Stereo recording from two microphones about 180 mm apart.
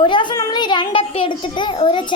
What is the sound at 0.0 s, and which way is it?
A child's voice, 25° left (ahead or behind).